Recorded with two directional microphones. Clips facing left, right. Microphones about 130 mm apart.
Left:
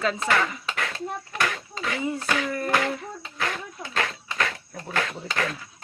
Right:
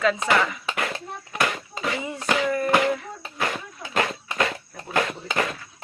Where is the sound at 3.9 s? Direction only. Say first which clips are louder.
Right 4 dB; 20° right (ahead or behind).